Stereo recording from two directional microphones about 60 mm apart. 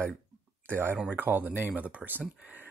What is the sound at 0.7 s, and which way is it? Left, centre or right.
Speech, right.